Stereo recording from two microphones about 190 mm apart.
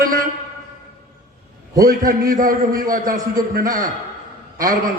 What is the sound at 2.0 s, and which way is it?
A man's voice, 45° right (ahead or behind).